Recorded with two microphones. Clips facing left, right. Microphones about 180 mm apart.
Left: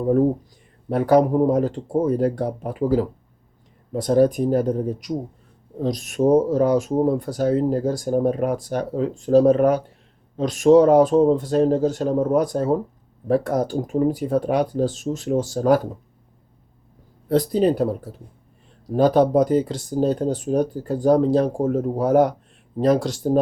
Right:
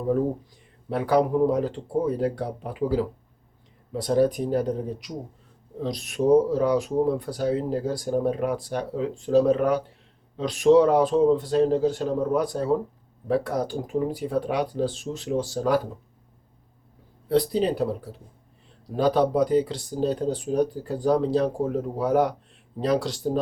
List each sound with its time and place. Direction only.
0.9 s speech: 45° left (ahead or behind)
17.2 s speech: 45° left (ahead or behind)
18.9 s speech: 45° left (ahead or behind)